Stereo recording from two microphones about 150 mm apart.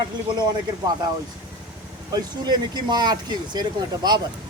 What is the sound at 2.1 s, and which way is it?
A man's voice, 30° right (ahead or behind).